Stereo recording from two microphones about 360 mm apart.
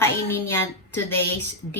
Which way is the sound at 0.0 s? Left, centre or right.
Centre.